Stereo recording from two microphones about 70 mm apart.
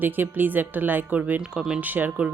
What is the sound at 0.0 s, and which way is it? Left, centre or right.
Speech, right.